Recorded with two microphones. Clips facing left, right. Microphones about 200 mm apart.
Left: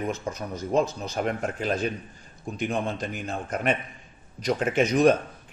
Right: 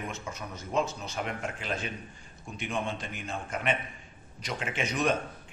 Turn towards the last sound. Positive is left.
turn(degrees=40)  # may be behind; listen again after turning